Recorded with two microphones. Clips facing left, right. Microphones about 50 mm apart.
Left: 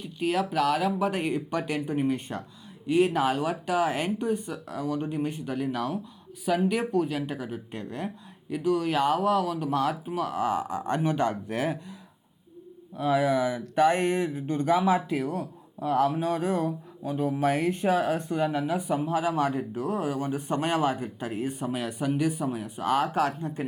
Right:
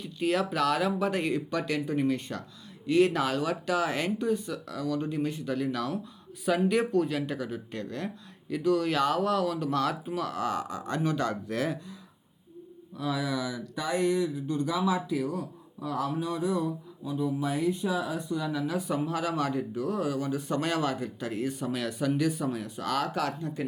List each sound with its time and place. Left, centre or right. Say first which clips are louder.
0.0 s speech: left 1 dB; centre
1.2 s speech: left 1 dB; left
2.9 s speech: left 1 dB; centre
6.4 s speech: even; centre; by 11.9 s left
13.0 s speech: left 7 dB; left